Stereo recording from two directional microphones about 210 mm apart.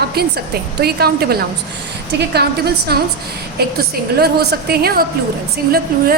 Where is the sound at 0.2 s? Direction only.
50° right (ahead or behind).